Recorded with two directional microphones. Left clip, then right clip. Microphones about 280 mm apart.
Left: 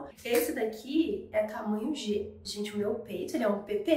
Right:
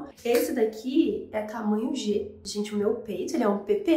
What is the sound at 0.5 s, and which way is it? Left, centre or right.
Speech, right.